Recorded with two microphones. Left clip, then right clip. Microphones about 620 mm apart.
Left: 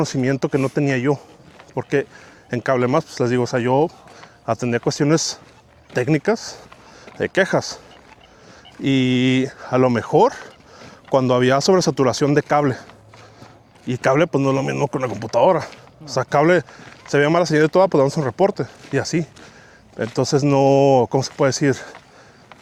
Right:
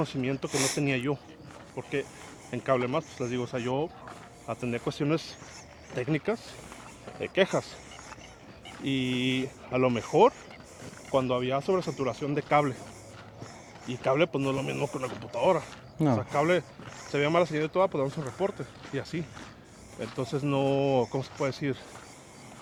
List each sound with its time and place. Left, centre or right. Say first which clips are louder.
0.0 s speech: left 11 dB; left
0.9 s speech: left 10 dB; left
1.7 s speech: left 12 dB; left
8.8 s speech: left 12 dB; left
9.0 s speech: left 11 dB; left
9.6 s speech: left 9 dB; left
11.1 s speech: left 11 dB; left
12.3 s speech: left 9 dB; left
13.9 s speech: left 9 dB; left
15.3 s speech: left 10 dB; left
16.1 s speech: left 13 dB; left
17.1 s speech: left 9 dB; left